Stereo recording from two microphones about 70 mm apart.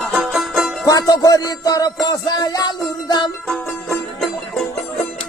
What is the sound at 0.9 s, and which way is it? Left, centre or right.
Music, left.